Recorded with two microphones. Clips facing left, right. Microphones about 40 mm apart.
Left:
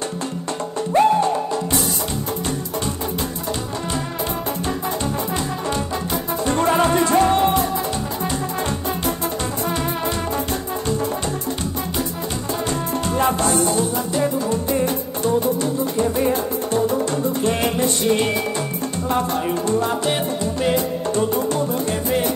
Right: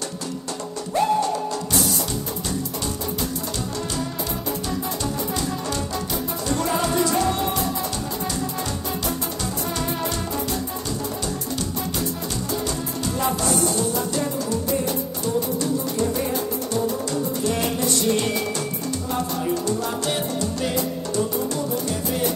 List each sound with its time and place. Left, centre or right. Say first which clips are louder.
0.9 s music: left 5 dB; left
6.4 s music: left 6 dB; left
13.0 s music: left 4 dB; left
14.5 s music: left 3 dB; left
19.0 s music: left 5 dB; left
19.9 s music: left 4 dB; left
21.1 s music: left 5 dB; left